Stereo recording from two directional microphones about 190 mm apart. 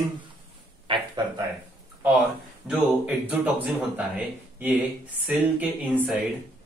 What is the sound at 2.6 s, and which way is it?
Speech, 5° right (ahead or behind).